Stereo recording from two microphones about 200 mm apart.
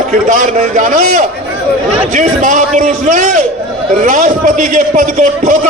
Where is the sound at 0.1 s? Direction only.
40° right (ahead or behind).